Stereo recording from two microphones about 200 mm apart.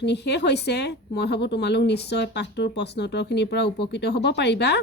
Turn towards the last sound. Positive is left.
turn(degrees=60)  # may be behind; listen again after turning